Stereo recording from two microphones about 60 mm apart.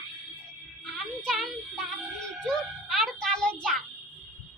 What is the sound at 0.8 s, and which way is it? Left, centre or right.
Music, centre.